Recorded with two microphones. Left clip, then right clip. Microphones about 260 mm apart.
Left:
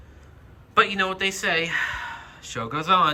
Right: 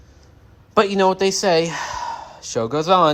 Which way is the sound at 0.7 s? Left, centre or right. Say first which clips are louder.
Right 5 dB; centre.